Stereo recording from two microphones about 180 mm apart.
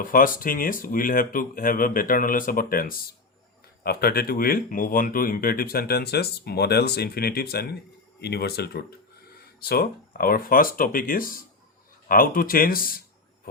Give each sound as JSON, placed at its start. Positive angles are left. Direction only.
{"t": 0.0, "sound": "speech", "side_deg": 50}